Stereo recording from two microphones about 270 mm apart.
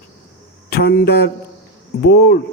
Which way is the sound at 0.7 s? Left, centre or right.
Left.